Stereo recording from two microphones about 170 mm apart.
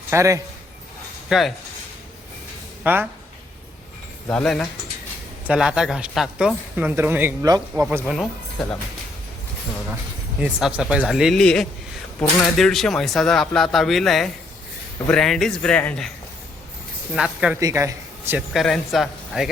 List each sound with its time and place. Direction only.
0.1 s a man's voice: 15° right (ahead or behind)
1.3 s a man's voice: centre (ahead or behind)
2.8 s speech: 10° right (ahead or behind)
4.3 s a man's voice: 5° left (ahead or behind)
7.4 s speech: 20° right (ahead or behind)
7.9 s a man's voice: 5° right (ahead or behind)
10.4 s a man's voice: 5° right (ahead or behind)
17.2 s a man's voice: 5° right (ahead or behind)
17.6 s a man's voice: 20° right (ahead or behind)
18.5 s a man's voice: centre (ahead or behind)